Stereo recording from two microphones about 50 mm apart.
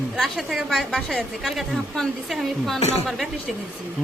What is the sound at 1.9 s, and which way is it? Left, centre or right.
A man's voice, centre.